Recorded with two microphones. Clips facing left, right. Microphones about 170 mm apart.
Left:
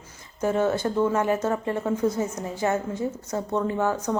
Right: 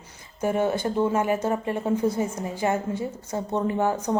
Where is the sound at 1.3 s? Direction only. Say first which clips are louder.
Even; 25° right (ahead or behind).